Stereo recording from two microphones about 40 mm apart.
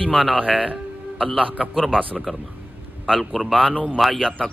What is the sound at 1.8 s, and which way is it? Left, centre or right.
Speech, left.